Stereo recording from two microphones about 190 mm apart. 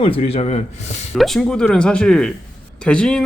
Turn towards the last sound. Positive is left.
turn(degrees=5)  # may be behind; listen again after turning